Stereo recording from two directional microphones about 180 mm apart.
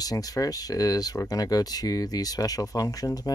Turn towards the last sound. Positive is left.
turn(degrees=20)  # may be behind; listen again after turning